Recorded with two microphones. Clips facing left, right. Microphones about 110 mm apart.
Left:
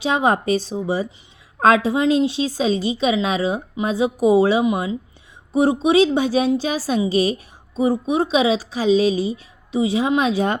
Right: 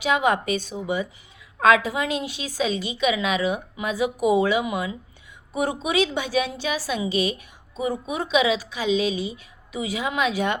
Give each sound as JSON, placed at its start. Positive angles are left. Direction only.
{"t": 0.0, "sound": "a woman's voice", "side_deg": 30}